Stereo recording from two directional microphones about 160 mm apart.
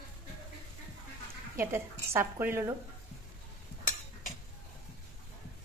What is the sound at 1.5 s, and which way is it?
Speech, 15° right (ahead or behind).